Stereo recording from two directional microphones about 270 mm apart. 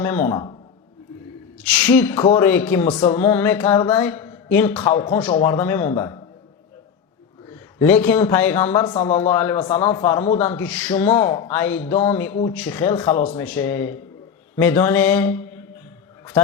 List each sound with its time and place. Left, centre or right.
0.0 s speech: centre
1.7 s speech: centre
7.8 s speech: centre
9.0 s speech: left
9.2 s speech: centre